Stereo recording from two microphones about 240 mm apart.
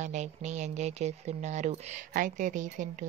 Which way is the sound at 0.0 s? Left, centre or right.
Right.